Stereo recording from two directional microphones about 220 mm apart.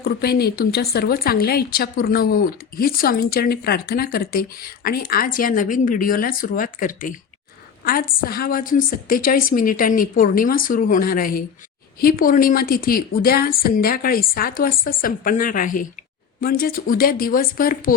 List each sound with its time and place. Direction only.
0.0 s a woman's voice: 45° left (ahead or behind)